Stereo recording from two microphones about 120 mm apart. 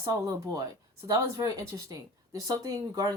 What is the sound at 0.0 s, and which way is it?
A woman's voice, 30° right (ahead or behind).